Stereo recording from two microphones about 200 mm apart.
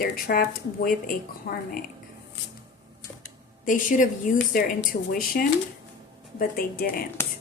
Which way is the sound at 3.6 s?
40° left (ahead or behind).